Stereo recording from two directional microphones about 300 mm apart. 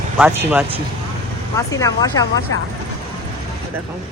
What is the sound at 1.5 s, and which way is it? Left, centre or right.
Speech, centre.